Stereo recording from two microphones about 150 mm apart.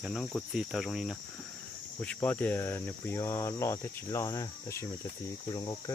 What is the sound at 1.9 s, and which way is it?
Cricket, 10° left (ahead or behind).